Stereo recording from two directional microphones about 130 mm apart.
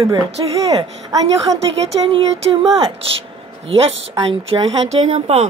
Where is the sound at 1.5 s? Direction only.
50° right (ahead or behind).